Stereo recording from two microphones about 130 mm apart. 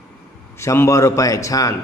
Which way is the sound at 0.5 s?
20° left (ahead or behind).